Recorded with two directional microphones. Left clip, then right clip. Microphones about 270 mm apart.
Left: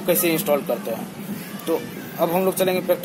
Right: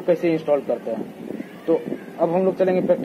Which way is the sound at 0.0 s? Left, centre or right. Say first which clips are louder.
Right 1 dB; left.